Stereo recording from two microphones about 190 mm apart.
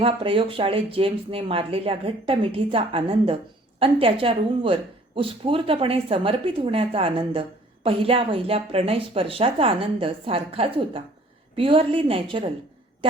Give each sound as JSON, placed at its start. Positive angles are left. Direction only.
{"t": 0.0, "sound": "speech", "side_deg": -30}